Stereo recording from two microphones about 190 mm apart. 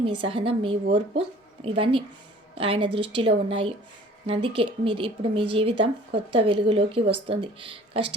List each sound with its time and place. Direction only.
0.0 s speech: 30° right (ahead or behind)